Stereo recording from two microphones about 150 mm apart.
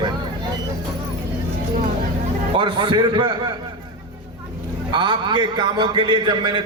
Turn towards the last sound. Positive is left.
turn(degrees=-30)  # may be behind; listen again after turning